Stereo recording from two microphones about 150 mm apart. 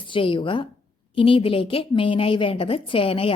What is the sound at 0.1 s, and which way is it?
A woman's voice, 35° left (ahead or behind).